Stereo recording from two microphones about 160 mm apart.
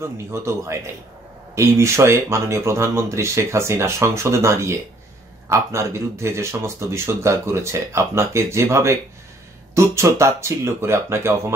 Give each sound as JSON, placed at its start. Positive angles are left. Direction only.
{"t": 0.0, "sound": "speech", "side_deg": -15}